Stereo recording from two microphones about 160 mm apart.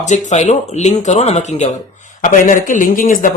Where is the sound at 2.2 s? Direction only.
55° left (ahead or behind).